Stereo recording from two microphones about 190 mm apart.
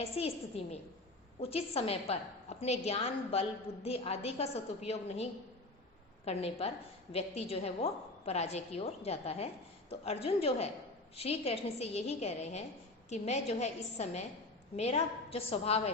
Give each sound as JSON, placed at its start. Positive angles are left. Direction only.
{"t": 0.0, "sound": "a woman's voice", "side_deg": 30}